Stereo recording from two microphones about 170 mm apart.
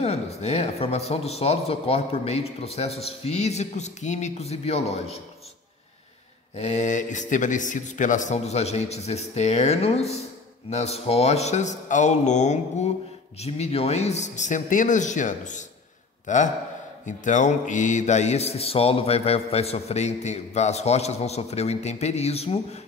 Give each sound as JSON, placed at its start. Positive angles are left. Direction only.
{"t": 0.0, "sound": "speech", "side_deg": 40}
{"t": 6.5, "sound": "speech", "side_deg": 45}